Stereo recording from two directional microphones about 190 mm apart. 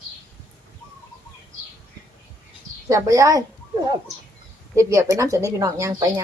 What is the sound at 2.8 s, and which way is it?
Speech, 15° right (ahead or behind).